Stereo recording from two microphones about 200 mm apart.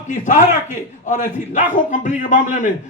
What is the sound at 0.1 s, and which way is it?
A man's voice, 40° left (ahead or behind).